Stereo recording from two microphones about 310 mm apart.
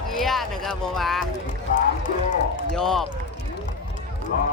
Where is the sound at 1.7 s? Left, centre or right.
Left.